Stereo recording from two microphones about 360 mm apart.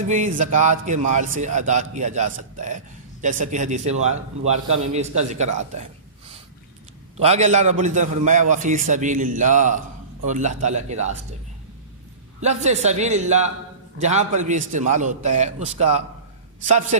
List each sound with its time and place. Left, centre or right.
0.1 s a man's voice: right
5.5 s gasp: centre
7.2 s a man's voice: centre
12.4 s a man's voice: centre